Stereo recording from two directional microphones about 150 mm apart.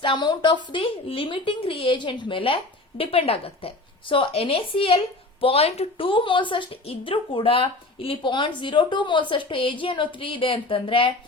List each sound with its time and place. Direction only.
0.0 s a woman's voice: 30° left (ahead or behind)